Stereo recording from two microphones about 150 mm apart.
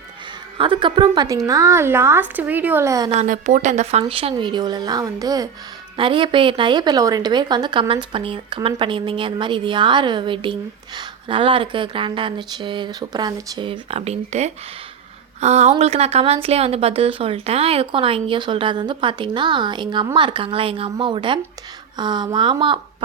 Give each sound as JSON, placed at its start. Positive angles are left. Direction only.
{"t": 0.6, "sound": "a woman's voice", "side_deg": -35}
{"t": 3.2, "sound": "a woman's voice", "side_deg": -55}
{"t": 4.0, "sound": "a woman's voice", "side_deg": -35}